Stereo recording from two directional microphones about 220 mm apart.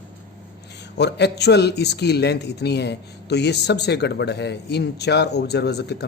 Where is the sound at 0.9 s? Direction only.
50° left (ahead or behind).